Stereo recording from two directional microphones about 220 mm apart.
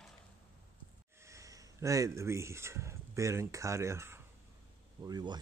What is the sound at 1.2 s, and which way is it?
Speech, 15° right (ahead or behind).